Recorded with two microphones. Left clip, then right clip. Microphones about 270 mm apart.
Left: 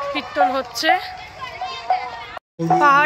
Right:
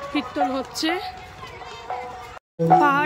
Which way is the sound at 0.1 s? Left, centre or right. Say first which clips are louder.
Left 5 dB; centre.